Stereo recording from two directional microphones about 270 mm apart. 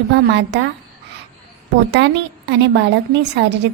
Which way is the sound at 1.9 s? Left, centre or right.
Right.